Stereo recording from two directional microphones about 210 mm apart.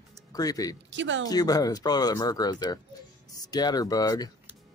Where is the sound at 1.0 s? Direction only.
60° right (ahead or behind).